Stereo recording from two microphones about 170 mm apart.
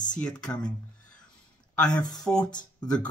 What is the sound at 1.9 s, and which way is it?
Speech, 20° left (ahead or behind).